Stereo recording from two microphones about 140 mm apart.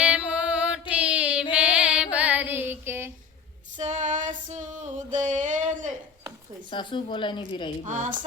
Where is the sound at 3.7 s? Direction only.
60° right (ahead or behind).